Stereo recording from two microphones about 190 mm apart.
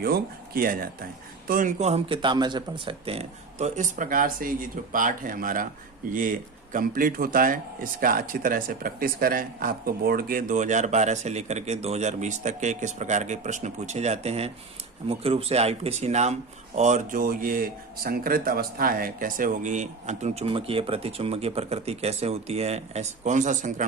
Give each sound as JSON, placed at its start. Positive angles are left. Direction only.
{"t": 0.0, "sound": "speech", "side_deg": -50}